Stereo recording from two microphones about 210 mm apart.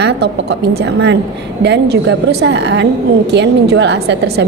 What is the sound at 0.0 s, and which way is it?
A woman's voice, 55° right (ahead or behind).